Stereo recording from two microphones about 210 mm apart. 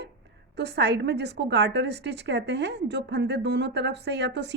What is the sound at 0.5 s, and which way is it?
Speech, 55° right (ahead or behind).